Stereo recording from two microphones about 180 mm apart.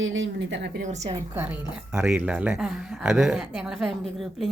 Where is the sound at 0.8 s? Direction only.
40° right (ahead or behind).